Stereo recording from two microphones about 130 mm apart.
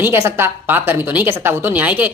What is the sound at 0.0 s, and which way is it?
A woman's voice, 20° right (ahead or behind).